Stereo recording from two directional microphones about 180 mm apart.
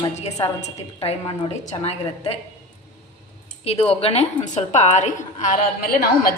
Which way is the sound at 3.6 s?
35° left (ahead or behind).